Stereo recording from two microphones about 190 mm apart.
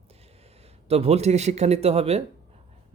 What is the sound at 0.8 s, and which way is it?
A man's voice, 30° right (ahead or behind).